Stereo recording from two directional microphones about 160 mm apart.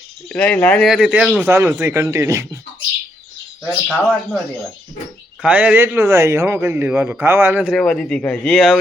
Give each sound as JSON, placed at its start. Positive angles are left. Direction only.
{"t": 0.3, "sound": "speech", "side_deg": 5}
{"t": 1.5, "sound": "a man's voice", "side_deg": -15}
{"t": 3.8, "sound": "speech", "side_deg": 0}
{"t": 5.4, "sound": "a man's voice", "side_deg": -10}
{"t": 7.8, "sound": "speech", "side_deg": 5}